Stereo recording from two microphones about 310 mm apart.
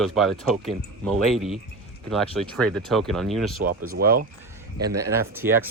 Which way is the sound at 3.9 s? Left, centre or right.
Right.